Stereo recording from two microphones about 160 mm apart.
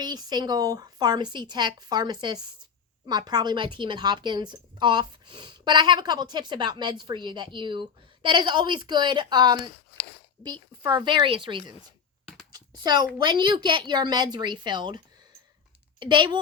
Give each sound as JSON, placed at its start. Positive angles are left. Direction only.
{"t": 0.0, "sound": "a woman's voice", "side_deg": -25}
{"t": 12.5, "sound": "a sound", "side_deg": -25}
{"t": 13.2, "sound": "a woman's voice", "side_deg": -30}